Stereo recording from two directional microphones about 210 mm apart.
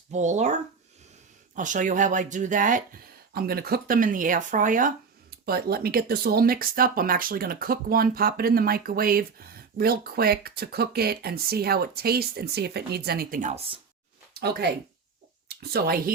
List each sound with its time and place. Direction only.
0.1 s speech: 35° right (ahead or behind)
1.5 s speech: 35° right (ahead or behind)
14.3 s speech: 50° right (ahead or behind)